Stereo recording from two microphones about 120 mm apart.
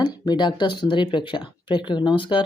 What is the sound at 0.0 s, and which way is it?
Speech, 35° left (ahead or behind).